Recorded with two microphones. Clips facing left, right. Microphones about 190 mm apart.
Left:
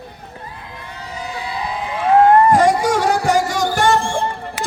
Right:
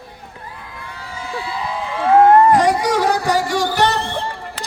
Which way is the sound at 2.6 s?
45° left (ahead or behind).